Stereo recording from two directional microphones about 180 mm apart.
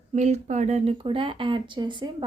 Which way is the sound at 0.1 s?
40° right (ahead or behind).